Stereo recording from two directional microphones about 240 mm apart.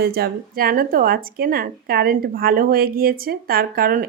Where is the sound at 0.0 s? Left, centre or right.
Right.